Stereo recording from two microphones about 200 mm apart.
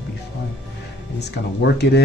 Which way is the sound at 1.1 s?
55° left (ahead or behind).